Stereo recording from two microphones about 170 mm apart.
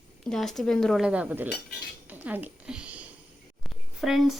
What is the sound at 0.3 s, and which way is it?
A woman's voice, centre (ahead or behind).